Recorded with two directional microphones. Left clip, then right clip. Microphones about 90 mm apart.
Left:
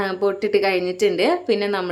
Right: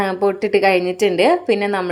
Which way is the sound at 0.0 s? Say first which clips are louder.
Right 3 dB; 30° right (ahead or behind).